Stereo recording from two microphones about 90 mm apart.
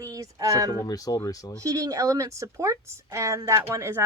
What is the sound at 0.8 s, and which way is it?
Speech, 40° left (ahead or behind).